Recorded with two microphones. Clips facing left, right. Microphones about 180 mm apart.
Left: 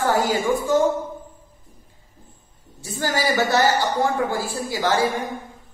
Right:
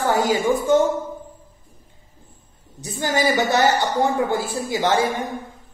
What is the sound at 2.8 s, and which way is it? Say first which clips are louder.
A woman's voice: right 2 dB; 20° right (ahead or behind).